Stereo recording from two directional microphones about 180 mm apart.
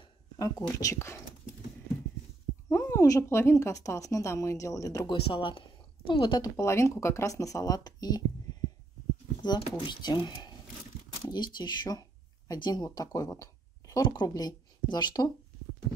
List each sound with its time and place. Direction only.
0.4 s speech: 20° left (ahead or behind)
2.7 s speech: 15° left (ahead or behind)
5.2 s speech: 30° left (ahead or behind)
8.5 s heart sounds: 25° left (ahead or behind)
9.4 s speech: 25° left (ahead or behind)